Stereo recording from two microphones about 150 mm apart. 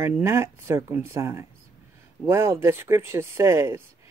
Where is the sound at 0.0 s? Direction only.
15° right (ahead or behind).